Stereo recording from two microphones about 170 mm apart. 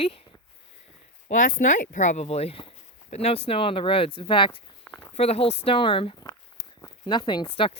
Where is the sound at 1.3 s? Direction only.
50° left (ahead or behind); by 4.6 s 30° left (ahead or behind).